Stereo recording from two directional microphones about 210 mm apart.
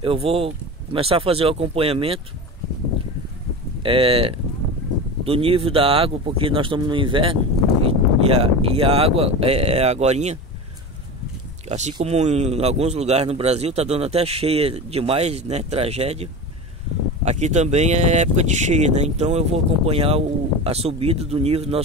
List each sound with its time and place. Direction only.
0.0 s a man's voice: 25° right (ahead or behind)
3.8 s a man's voice: 25° right (ahead or behind)
11.9 s a man's voice: 30° right (ahead or behind)